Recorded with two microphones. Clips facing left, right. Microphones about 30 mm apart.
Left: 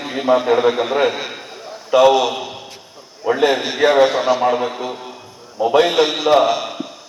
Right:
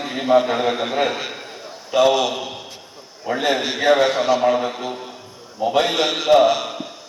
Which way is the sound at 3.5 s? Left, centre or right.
Centre.